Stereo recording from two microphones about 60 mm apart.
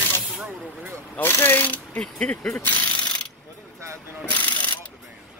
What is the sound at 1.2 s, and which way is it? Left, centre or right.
Speech, left.